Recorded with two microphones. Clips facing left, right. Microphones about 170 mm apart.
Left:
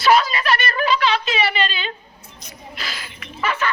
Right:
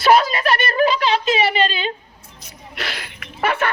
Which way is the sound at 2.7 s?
65° right (ahead or behind).